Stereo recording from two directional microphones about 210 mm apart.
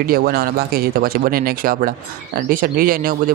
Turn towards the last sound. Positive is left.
turn(degrees=-40)  # may be behind; listen again after turning